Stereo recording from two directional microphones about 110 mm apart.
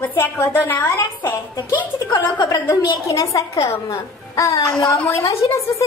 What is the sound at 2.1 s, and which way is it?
A woman's voice, 35° left (ahead or behind).